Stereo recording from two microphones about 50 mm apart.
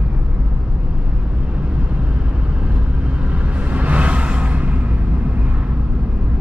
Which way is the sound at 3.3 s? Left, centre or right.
Right.